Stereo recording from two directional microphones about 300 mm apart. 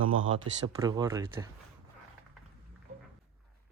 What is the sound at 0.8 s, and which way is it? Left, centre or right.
Speech, centre.